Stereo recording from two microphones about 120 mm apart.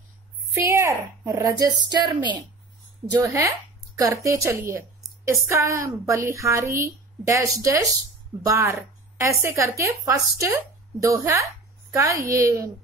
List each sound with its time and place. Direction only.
0.6 s speech: 20° right (ahead or behind)
3.1 s a woman's voice: 30° right (ahead or behind)